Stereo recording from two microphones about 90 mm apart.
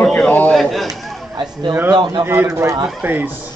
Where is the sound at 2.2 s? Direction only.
25° right (ahead or behind).